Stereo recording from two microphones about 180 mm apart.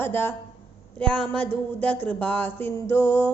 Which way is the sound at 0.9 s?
5° left (ahead or behind).